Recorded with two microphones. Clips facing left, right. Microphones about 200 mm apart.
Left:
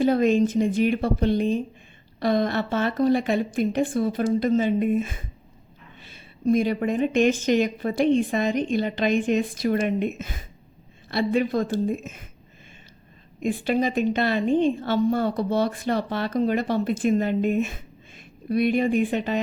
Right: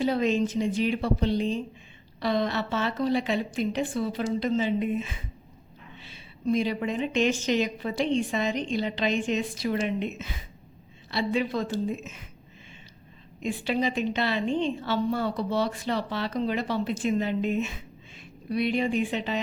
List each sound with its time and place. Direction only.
0.0 s a woman's voice: 50° left (ahead or behind)
13.4 s a woman's voice: 50° left (ahead or behind)